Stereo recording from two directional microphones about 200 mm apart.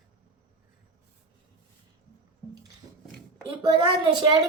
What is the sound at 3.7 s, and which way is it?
Speech, 20° right (ahead or behind).